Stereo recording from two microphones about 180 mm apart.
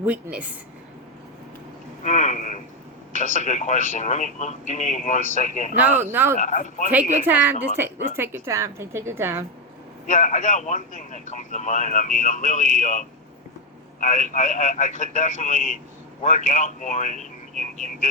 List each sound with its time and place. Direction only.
0.0 s a woman's voice: 5° right (ahead or behind)
2.0 s a sound: 40° left (ahead or behind)
3.1 s a man's voice: 45° left (ahead or behind)
5.8 s a woman's voice: 10° right (ahead or behind)
6.4 s a man's voice: 45° left (ahead or behind)
6.9 s a woman's voice: 10° right (ahead or behind)
7.8 s a sound: 15° right (ahead or behind)
8.1 s a woman's voice: 15° right (ahead or behind)
10.1 s a man's voice: 45° left (ahead or behind)